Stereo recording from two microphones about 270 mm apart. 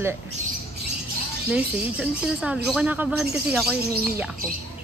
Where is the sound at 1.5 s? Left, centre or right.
Centre.